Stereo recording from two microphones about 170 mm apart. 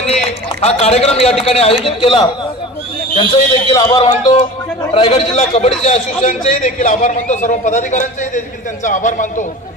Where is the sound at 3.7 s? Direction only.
20° left (ahead or behind).